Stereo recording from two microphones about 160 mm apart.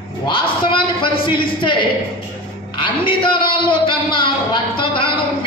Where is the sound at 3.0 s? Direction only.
30° left (ahead or behind).